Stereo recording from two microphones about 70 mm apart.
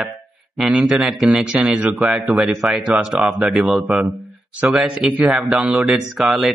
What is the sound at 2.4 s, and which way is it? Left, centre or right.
Speech, centre.